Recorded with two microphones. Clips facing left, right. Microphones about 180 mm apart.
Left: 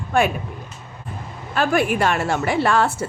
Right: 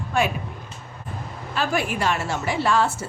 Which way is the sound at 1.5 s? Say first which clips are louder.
Left 5 dB; 55° left (ahead or behind).